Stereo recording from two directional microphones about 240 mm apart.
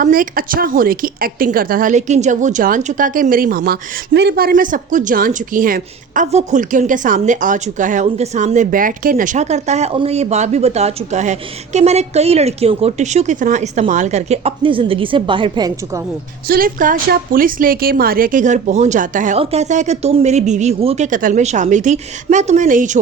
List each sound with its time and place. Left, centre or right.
0.0 s a woman's voice: right; by 15.7 s centre
16.5 s a woman's voice: right